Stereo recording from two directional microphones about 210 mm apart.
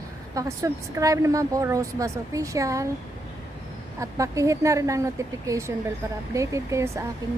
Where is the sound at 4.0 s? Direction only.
15° right (ahead or behind).